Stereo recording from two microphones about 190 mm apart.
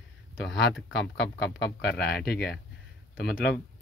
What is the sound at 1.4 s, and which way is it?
A man's voice, 55° left (ahead or behind).